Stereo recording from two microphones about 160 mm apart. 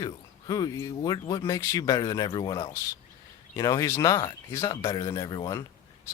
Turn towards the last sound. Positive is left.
turn(degrees=25)  # may be behind; listen again after turning